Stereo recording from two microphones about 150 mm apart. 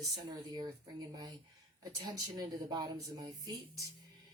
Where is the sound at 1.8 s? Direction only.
25° right (ahead or behind).